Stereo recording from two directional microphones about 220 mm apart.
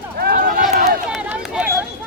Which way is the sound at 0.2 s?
45° right (ahead or behind).